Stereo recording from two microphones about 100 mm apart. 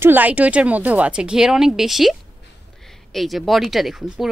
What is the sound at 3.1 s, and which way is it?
Speech, centre (ahead or behind).